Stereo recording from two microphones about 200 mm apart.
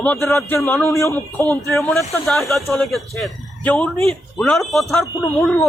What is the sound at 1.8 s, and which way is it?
Speech, centre (ahead or behind).